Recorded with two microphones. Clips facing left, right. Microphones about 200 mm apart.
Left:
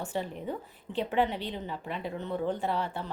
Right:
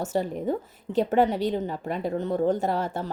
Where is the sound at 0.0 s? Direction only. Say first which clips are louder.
Right 7 dB; 40° right (ahead or behind).